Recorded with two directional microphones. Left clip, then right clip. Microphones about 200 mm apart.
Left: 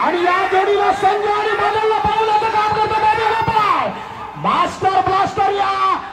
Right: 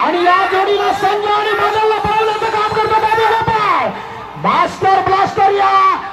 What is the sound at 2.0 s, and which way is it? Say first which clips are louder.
Music: right 1 dB; 50° right (ahead or behind).